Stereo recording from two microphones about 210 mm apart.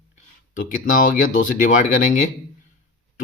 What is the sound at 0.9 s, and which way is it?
Speech, 40° left (ahead or behind).